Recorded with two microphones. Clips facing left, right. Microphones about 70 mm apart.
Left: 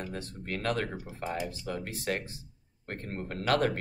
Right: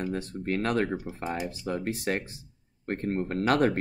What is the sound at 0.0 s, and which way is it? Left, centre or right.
Speech, right.